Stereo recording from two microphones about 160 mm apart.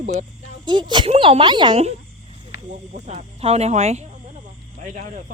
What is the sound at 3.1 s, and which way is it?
Speech, 40° right (ahead or behind).